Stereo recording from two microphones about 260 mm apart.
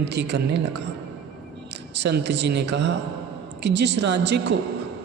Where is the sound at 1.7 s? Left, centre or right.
Right.